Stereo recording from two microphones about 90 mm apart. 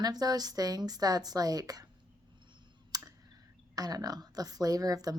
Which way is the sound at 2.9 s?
45° right (ahead or behind).